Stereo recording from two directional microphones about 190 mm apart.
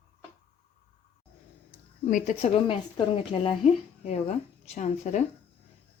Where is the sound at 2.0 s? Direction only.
40° left (ahead or behind).